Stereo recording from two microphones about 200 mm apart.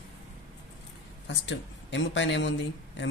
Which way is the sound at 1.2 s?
65° left (ahead or behind).